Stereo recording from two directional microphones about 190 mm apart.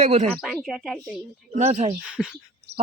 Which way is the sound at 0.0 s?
40° right (ahead or behind).